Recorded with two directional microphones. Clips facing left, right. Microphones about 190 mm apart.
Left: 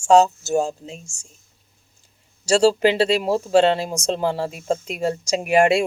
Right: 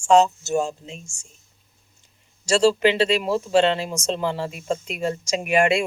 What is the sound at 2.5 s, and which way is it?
Speech, 35° left (ahead or behind).